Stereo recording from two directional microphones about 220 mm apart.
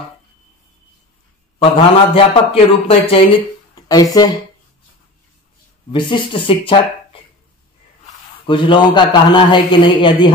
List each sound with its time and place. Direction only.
1.6 s a man's voice: 25° left (ahead or behind)
5.9 s a man's voice: 20° left (ahead or behind)
8.5 s a man's voice: 20° left (ahead or behind)